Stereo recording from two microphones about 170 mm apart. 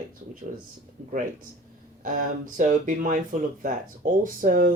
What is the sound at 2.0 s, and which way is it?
Speech, 50° right (ahead or behind).